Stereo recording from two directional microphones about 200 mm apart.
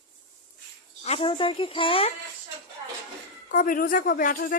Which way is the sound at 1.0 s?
30° left (ahead or behind).